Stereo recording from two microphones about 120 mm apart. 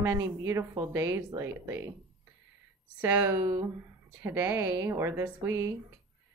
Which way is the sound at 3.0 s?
20° right (ahead or behind).